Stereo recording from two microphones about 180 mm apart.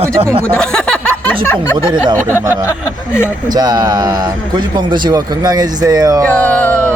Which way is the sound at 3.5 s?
20° right (ahead or behind).